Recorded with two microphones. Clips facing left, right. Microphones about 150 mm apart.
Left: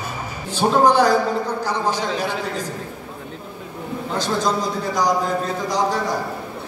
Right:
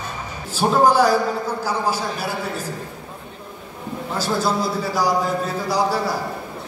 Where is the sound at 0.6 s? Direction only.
5° right (ahead or behind).